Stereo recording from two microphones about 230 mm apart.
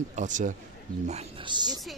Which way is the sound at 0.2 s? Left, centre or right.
Right.